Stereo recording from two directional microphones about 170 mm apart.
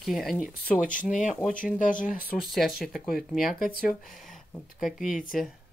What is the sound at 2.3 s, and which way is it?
Speech, centre (ahead or behind).